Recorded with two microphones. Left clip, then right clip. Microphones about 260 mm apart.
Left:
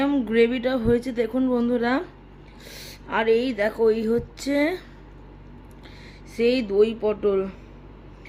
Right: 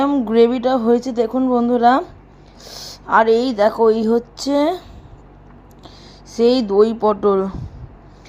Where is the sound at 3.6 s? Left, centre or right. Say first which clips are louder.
Right 7 dB; centre.